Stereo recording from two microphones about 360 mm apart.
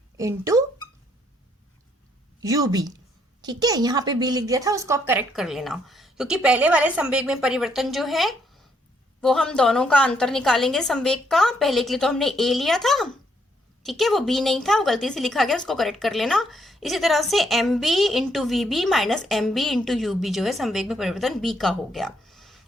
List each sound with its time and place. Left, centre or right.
0.2 s a woman's voice: centre
2.4 s a woman's voice: centre